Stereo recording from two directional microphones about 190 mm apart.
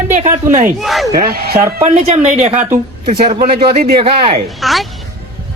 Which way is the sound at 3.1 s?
25° right (ahead or behind).